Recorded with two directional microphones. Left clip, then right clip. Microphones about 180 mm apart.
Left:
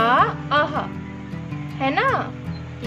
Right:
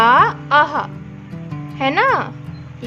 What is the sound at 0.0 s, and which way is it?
Music, 45° right (ahead or behind).